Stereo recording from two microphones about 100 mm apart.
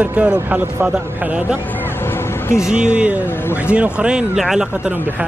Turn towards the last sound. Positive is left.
turn(degrees=-5)  # may be behind; listen again after turning